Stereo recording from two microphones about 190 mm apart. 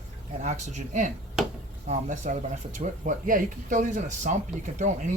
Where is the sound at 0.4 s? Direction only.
40° right (ahead or behind).